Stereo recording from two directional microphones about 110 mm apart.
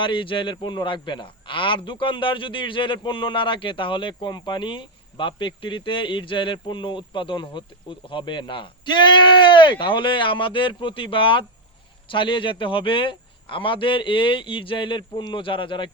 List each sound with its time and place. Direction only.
0.0 s a man's voice: 50° left (ahead or behind)